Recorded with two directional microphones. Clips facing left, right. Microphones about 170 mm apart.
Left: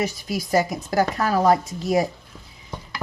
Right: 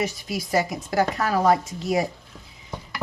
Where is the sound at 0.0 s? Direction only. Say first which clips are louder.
Left 2 dB; 40° left (ahead or behind).